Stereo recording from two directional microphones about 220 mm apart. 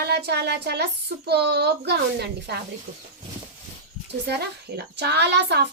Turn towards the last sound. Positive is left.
turn(degrees=-50)  # may be behind; listen again after turning